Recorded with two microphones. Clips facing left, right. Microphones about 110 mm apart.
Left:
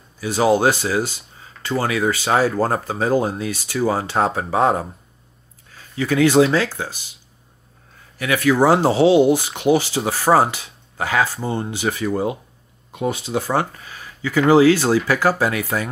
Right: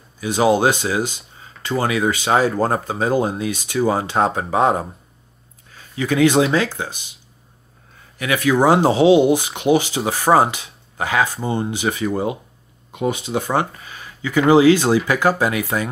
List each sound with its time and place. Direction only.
0.2 s speech: 15° right (ahead or behind)
5.9 s speech: 15° right (ahead or behind)
8.2 s speech: 15° right (ahead or behind)
13.8 s a sound: 15° right (ahead or behind)
14.5 s speech: 15° right (ahead or behind)